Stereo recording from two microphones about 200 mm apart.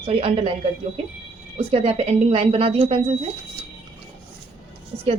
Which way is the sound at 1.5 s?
30° right (ahead or behind).